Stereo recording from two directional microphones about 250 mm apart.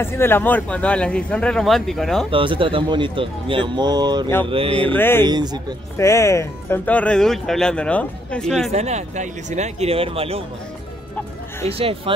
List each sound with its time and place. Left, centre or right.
0.0 s speech: centre
2.3 s speech: right
4.8 s speech: centre
5.2 s speech: centre
5.9 s speech: centre
8.7 s speech: right
11.7 s speech: right